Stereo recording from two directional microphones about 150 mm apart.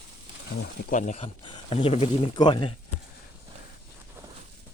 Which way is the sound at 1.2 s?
35° left (ahead or behind).